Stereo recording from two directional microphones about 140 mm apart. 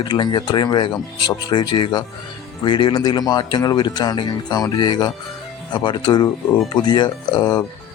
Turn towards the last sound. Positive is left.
turn(degrees=30)  # may be behind; listen again after turning